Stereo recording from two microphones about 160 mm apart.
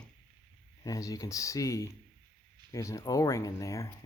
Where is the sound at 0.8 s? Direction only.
20° left (ahead or behind).